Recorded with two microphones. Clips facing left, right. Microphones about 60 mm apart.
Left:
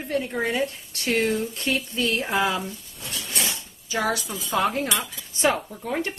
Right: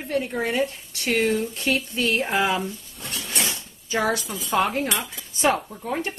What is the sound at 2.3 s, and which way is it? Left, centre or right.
Speech, right.